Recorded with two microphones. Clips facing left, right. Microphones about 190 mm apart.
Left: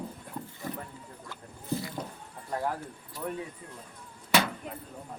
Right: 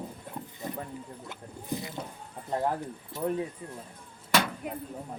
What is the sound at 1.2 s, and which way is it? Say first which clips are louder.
Speech: left 4 dB; 20° right (ahead or behind).